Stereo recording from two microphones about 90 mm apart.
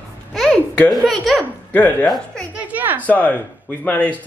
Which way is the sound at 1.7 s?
20° left (ahead or behind).